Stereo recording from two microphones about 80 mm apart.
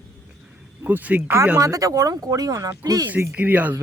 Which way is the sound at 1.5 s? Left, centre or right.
Right.